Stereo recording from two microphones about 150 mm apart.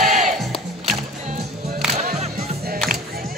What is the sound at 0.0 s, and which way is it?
Music, 55° right (ahead or behind).